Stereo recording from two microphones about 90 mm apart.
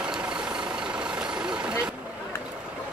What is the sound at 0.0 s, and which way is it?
Vehicle, 10° right (ahead or behind).